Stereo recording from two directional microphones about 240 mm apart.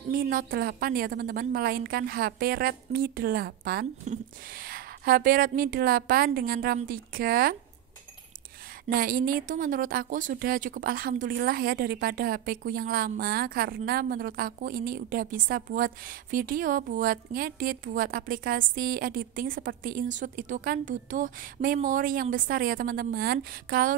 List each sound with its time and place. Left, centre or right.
0.1 s a woman's voice: right
8.8 s a woman's voice: right